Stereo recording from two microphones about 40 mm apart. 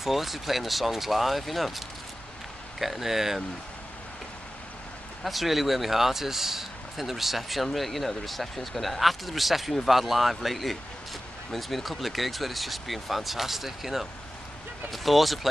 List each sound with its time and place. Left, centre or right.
0.0 s speech: centre
2.8 s speech: centre
5.2 s speech: centre